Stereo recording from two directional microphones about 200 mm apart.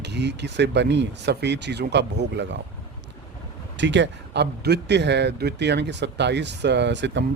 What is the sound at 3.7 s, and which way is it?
Speech, 65° right (ahead or behind).